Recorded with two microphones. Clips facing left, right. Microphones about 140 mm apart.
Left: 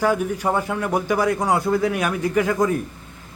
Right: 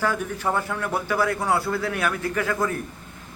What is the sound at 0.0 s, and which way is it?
A man's voice, 15° left (ahead or behind).